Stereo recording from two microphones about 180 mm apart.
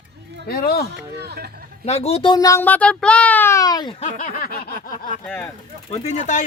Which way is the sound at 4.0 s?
45° left (ahead or behind).